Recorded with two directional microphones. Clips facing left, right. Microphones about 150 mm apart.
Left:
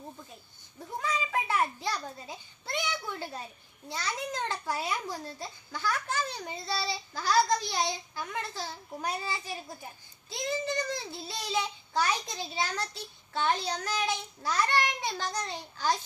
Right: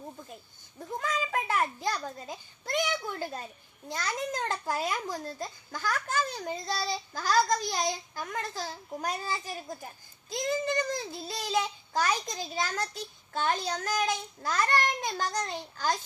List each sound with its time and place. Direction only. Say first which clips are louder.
1.0 s a sound: even; 50° right (ahead or behind)
3.8 s babbling: right 2 dB; 50° right (ahead or behind)
10.2 s child singing: right 3 dB; 45° right (ahead or behind)